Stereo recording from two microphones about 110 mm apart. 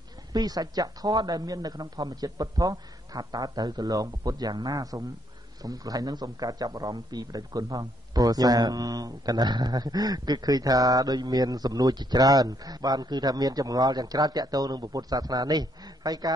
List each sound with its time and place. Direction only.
0.3 s a man's voice: 35° right (ahead or behind)